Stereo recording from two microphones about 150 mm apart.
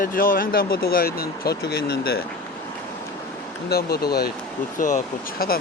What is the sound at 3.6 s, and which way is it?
Speech, 90° left.